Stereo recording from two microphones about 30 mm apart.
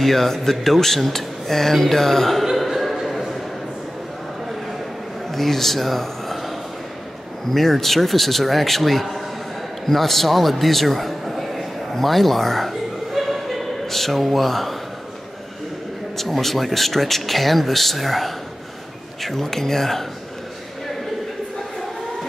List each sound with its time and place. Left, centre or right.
0.0 s speech: centre
2.5 s a sound: centre
5.3 s speech: centre
7.5 s a man's voice: centre
13.1 s a sound: centre
16.2 s speech: centre